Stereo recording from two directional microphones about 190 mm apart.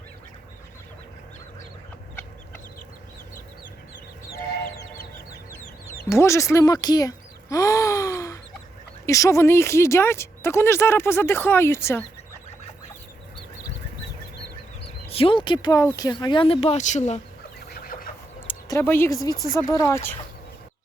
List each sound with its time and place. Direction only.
5.3 s chicken: 15° left (ahead or behind)
6.1 s speech: 15° left (ahead or behind)
7.5 s gasp: 15° left (ahead or behind)
9.0 s speech: 15° left (ahead or behind)
15.1 s speech: 30° left (ahead or behind)
17.7 s chicken: 50° left (ahead or behind)
18.7 s speech: 10° left (ahead or behind)